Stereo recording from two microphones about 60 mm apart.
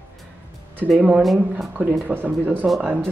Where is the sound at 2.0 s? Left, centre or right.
Right.